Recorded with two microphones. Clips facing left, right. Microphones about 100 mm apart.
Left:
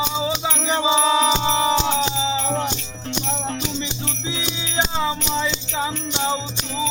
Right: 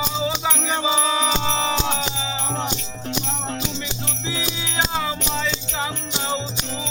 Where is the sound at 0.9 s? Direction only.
20° left (ahead or behind).